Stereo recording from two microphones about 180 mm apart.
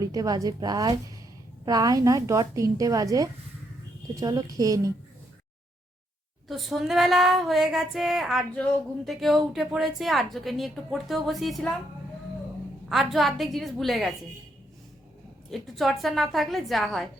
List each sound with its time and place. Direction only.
0.0 s a woman's voice: 20° right (ahead or behind)
6.5 s a woman's voice: centre (ahead or behind)
12.9 s a woman's voice: centre (ahead or behind)
15.4 s a woman's voice: centre (ahead or behind)